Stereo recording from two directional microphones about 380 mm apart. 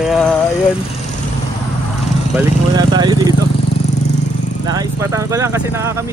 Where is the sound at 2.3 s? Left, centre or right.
Centre.